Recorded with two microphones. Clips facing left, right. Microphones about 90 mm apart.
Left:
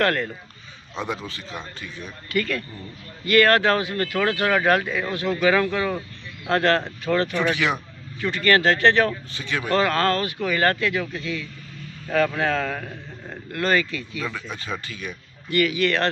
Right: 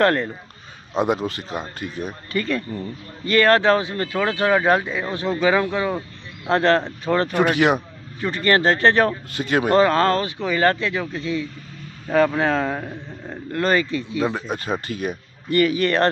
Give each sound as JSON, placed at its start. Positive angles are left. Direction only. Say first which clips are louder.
{"t": 0.0, "sound": "speech", "louder": "right 4 dB", "side_deg": -30}
{"t": 0.9, "sound": "speech", "louder": "right 9 dB", "side_deg": -50}
{"t": 2.3, "sound": "speech", "louder": "right 1 dB", "side_deg": -25}
{"t": 7.2, "sound": "speech", "louder": "right 5 dB", "side_deg": -45}
{"t": 8.2, "sound": "speech", "louder": "right 1 dB", "side_deg": -30}
{"t": 9.3, "sound": "speech", "louder": "right 6 dB", "side_deg": -50}
{"t": 13.5, "sound": "speech", "louder": "right 2 dB", "side_deg": -30}